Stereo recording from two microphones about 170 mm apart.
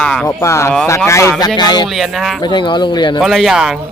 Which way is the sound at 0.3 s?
15° left (ahead or behind).